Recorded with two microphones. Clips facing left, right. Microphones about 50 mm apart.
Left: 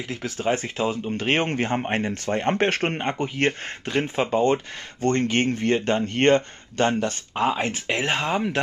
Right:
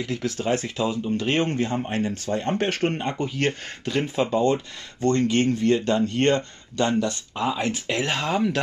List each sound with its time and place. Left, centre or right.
0.0 s speech: left